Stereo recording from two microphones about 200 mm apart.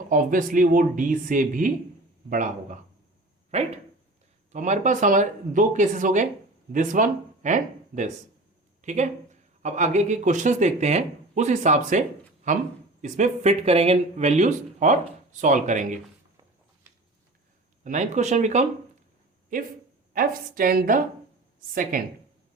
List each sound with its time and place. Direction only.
0.1 s speech: 40° right (ahead or behind)
17.8 s a woman's voice: 40° right (ahead or behind)